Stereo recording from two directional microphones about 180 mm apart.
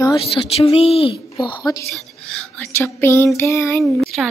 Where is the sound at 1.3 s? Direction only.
20° left (ahead or behind).